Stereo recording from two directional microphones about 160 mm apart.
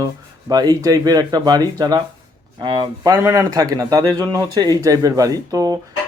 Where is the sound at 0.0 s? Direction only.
20° right (ahead or behind).